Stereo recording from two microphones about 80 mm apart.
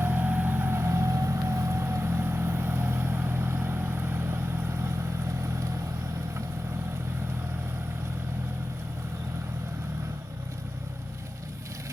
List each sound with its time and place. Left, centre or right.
0.0 s vehicle: right